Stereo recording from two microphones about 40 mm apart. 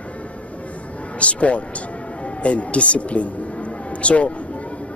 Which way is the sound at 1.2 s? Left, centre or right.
Left.